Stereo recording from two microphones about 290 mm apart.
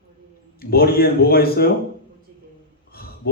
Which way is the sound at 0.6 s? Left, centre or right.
Left.